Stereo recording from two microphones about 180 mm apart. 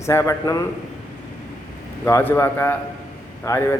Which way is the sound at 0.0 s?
15° left (ahead or behind).